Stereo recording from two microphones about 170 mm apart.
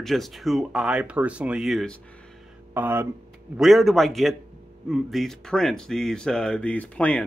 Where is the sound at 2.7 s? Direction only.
10° right (ahead or behind).